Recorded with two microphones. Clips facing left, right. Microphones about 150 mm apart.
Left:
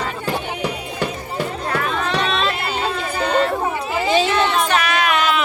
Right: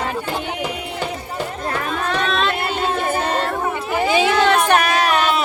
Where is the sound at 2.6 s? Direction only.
50° right (ahead or behind).